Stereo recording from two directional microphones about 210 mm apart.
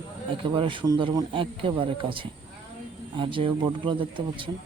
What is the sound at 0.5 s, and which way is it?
Speech, 25° right (ahead or behind).